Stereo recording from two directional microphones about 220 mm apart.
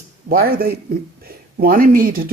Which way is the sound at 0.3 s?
40° right (ahead or behind).